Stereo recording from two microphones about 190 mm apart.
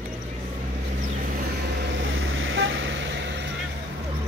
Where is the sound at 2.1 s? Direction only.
90° right; by 3.5 s 70° right (ahead or behind).